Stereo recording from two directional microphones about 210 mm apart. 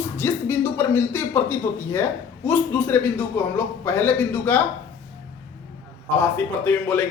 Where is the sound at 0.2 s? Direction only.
10° left (ahead or behind).